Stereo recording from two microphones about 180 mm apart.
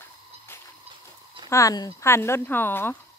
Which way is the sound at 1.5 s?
20° left (ahead or behind).